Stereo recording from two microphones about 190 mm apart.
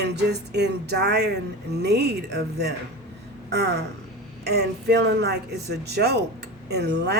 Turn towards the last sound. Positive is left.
turn(degrees=-60)  # may be behind; listen again after turning